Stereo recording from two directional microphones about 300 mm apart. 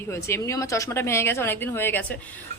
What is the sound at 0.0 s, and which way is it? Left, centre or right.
Speech, centre.